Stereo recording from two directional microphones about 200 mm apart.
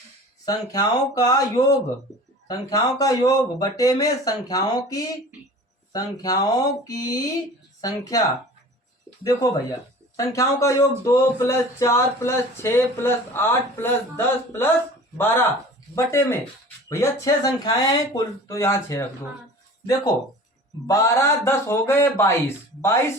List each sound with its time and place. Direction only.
0.4 s speech: 20° left (ahead or behind)
9.2 s speech: 20° left (ahead or behind)
20.8 s speech: 15° left (ahead or behind)